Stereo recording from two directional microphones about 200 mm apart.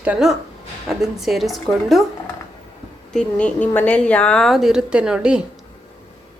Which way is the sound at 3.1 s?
5° left (ahead or behind).